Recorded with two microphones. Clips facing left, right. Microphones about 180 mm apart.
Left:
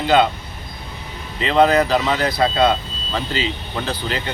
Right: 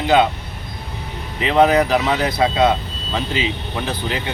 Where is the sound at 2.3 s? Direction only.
Centre (ahead or behind).